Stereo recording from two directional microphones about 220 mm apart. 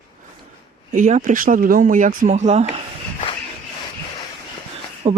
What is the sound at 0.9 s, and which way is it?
A man's voice, 35° right (ahead or behind).